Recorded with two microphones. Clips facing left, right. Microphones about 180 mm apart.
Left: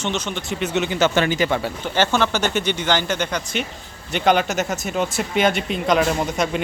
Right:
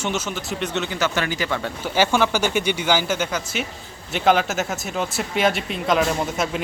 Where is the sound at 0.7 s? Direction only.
20° left (ahead or behind).